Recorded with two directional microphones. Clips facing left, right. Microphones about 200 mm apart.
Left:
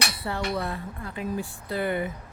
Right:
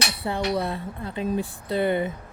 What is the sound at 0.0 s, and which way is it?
Speech, 15° right (ahead or behind).